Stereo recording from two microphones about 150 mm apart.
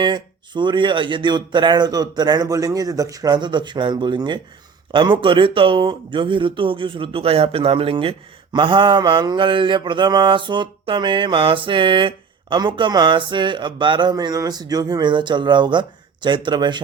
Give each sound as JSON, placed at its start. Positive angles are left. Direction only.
{"t": 0.0, "sound": "speech", "side_deg": -30}
{"t": 4.9, "sound": "mantra", "side_deg": -30}